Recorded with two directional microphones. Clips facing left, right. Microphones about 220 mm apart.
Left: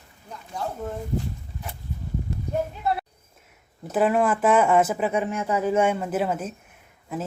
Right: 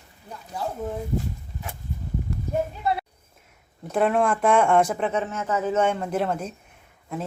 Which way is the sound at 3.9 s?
5° left (ahead or behind).